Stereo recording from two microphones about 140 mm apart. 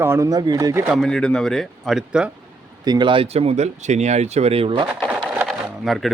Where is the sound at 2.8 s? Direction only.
30° right (ahead or behind).